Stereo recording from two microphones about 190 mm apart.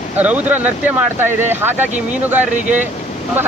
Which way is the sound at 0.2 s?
10° right (ahead or behind).